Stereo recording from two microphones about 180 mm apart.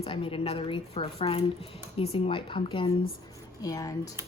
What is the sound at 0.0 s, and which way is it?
A woman's voice, 30° left (ahead or behind).